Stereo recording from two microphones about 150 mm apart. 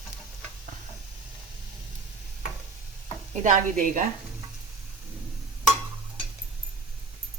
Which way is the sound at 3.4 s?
60° right (ahead or behind).